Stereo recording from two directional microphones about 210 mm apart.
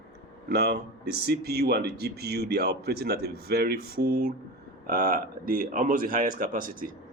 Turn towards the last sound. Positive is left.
turn(degrees=-40)  # may be behind; listen again after turning